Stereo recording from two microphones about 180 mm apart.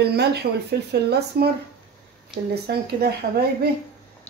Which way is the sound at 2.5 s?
60° right (ahead or behind).